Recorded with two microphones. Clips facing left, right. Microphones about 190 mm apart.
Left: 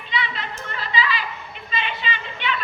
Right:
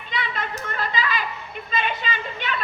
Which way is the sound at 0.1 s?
50° right (ahead or behind).